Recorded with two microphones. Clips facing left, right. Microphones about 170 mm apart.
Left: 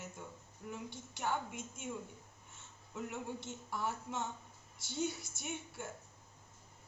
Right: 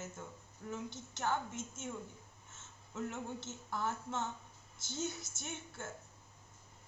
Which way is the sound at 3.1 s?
15° left (ahead or behind).